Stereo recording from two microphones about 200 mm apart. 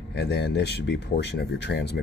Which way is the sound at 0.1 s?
55° left (ahead or behind).